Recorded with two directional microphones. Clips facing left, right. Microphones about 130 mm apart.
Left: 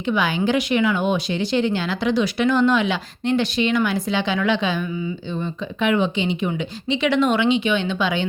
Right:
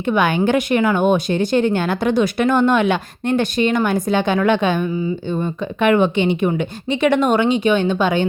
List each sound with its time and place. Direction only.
0.0 s speech: 55° right (ahead or behind)